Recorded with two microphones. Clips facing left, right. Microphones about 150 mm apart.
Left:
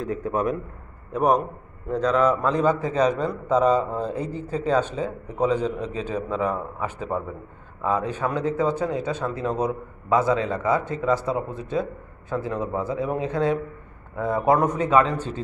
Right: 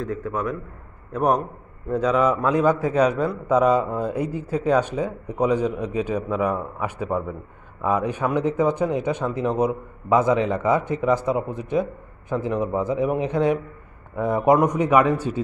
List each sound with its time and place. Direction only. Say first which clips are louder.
0.2 s a man's voice: left 2 dB; 20° left (ahead or behind)
1.1 s a man's voice: even; centre (ahead or behind)